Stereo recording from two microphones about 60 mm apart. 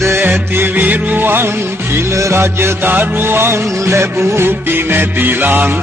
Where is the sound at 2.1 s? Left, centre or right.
Right.